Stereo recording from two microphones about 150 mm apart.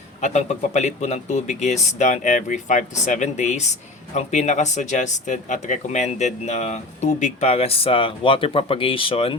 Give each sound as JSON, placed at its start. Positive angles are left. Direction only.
{"t": 0.2, "sound": "speech", "side_deg": 50}